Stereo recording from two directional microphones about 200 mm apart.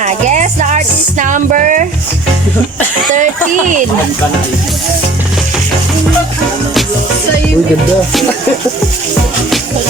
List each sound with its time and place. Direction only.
0.0 s music: 35° right (ahead or behind)